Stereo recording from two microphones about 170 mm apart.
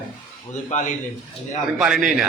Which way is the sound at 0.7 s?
45° left (ahead or behind).